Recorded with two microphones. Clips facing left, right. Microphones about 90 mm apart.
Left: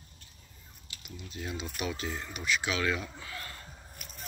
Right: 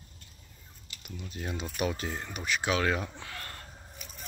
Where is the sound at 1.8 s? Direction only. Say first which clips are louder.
Right 4 dB; 40° right (ahead or behind).